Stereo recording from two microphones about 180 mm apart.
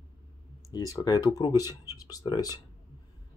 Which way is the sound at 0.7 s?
20° left (ahead or behind).